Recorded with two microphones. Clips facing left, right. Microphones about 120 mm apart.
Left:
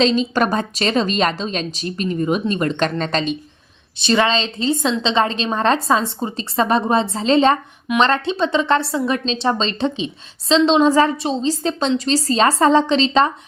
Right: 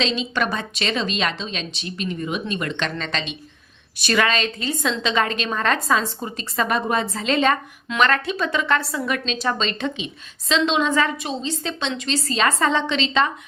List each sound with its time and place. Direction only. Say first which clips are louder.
0.0 s a woman's voice: left 7 dB; 40° left (ahead or behind)
3.9 s a woman's voice: left 4 dB; 25° left (ahead or behind)